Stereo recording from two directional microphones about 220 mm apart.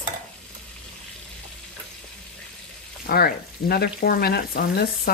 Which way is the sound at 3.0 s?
45° left (ahead or behind).